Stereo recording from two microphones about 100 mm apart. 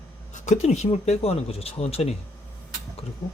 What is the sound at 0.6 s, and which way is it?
Speech, 90° left.